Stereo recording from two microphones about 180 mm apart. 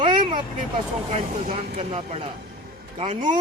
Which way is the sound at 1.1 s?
35° right (ahead or behind).